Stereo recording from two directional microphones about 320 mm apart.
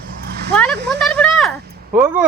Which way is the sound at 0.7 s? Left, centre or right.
Right.